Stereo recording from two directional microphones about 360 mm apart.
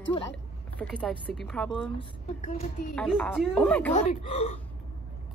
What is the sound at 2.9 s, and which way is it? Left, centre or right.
A woman's voice, centre.